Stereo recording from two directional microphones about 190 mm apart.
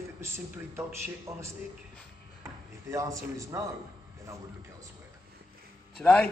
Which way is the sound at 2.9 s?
15° right (ahead or behind).